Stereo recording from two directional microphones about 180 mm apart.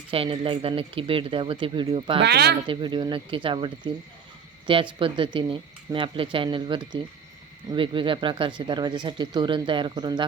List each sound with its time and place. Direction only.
0.1 s speech: 30° right (ahead or behind)
2.2 s speech: 65° right (ahead or behind)
2.6 s speech: 25° right (ahead or behind)